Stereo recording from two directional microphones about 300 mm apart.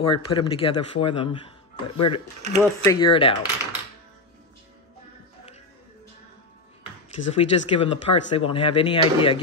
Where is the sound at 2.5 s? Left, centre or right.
Centre.